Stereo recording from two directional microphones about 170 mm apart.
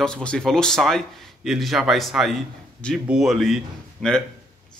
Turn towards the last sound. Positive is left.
turn(degrees=0)  # may be behind; listen again after turning